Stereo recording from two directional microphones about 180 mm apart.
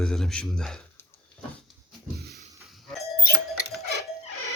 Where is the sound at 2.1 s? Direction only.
60° right (ahead or behind).